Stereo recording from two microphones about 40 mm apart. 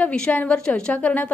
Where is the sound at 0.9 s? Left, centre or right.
Left.